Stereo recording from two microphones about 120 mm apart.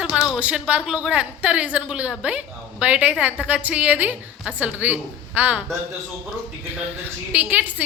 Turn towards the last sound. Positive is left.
turn(degrees=-10)  # may be behind; listen again after turning